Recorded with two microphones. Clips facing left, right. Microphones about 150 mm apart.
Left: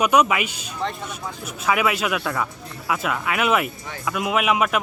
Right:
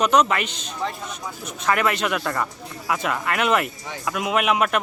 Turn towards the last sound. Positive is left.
turn(degrees=0)  # may be behind; listen again after turning